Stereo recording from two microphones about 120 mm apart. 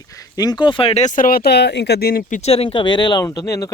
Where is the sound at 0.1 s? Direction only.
30° left (ahead or behind); by 1.0 s 50° left (ahead or behind).